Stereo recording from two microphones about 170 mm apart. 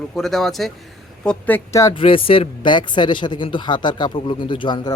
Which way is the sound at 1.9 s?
30° left (ahead or behind).